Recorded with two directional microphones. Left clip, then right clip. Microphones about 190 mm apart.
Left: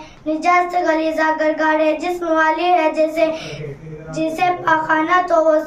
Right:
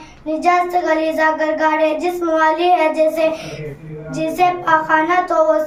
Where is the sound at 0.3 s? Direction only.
15° left (ahead or behind).